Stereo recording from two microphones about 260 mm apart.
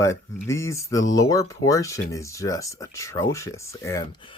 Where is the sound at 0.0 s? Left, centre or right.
Centre.